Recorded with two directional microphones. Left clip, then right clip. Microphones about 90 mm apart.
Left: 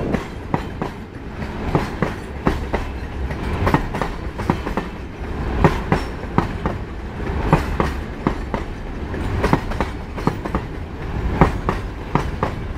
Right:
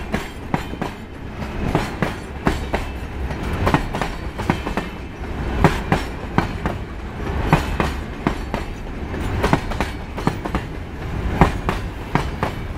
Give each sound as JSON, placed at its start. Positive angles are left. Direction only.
{"t": 0.1, "sound": "train", "side_deg": -30}